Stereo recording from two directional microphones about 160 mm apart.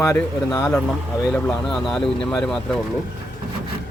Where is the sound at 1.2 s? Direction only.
Centre (ahead or behind).